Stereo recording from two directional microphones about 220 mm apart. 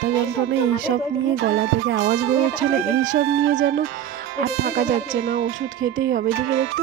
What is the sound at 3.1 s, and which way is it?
Speech, 65° right (ahead or behind).